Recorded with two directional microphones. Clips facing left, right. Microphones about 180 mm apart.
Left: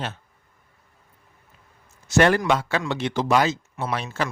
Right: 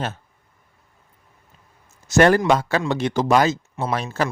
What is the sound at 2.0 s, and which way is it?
Speech, 45° right (ahead or behind).